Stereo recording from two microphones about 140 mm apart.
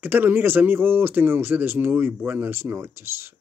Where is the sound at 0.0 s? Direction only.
15° right (ahead or behind).